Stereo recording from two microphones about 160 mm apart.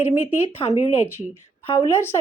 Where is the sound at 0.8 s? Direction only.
40° left (ahead or behind).